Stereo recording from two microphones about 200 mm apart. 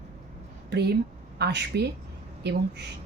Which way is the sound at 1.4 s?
55° right (ahead or behind).